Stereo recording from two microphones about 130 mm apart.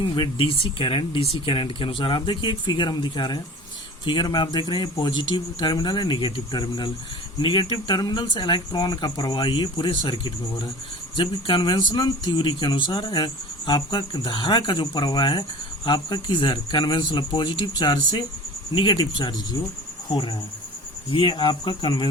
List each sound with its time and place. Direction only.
0.1 s speech: 40° left (ahead or behind)
21.1 s speech: 40° left (ahead or behind)